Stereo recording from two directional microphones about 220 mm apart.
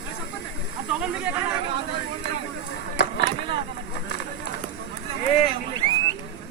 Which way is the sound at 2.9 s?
45° left (ahead or behind).